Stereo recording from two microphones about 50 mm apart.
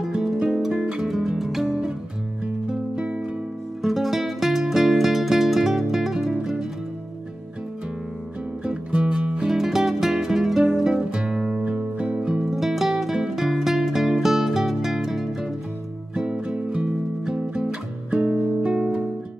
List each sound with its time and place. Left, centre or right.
0.0 s guitar: centre
0.6 s music: centre
8.6 s music: centre
9.5 s music: centre
12.4 s music: centre
18.1 s guitar: right
18.6 s music: right